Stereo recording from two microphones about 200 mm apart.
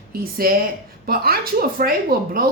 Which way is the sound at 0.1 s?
45° right (ahead or behind).